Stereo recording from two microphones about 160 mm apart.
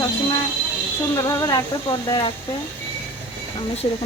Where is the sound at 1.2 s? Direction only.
25° left (ahead or behind).